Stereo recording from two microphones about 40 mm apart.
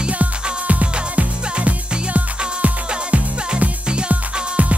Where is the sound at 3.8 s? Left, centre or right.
Right.